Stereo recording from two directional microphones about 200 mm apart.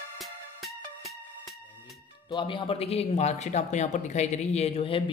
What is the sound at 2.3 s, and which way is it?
Speech, 25° left (ahead or behind).